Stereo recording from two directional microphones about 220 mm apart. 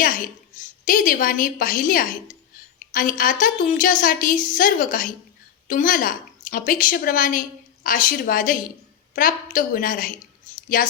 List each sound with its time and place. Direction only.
0.0 s a woman's voice: 40° left (ahead or behind)